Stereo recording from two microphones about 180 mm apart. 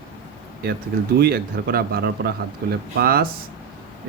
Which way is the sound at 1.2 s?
60° right (ahead or behind).